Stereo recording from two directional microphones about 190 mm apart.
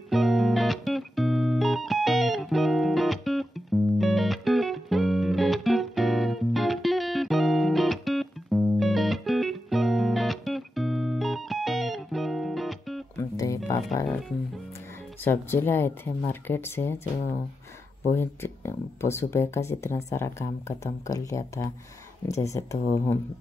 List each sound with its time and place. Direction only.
0.1 s music: centre (ahead or behind)
13.2 s music: 15° left (ahead or behind)
15.2 s speech: 10° left (ahead or behind)